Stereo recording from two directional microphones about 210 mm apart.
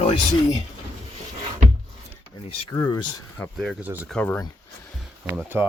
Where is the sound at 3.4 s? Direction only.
5° left (ahead or behind).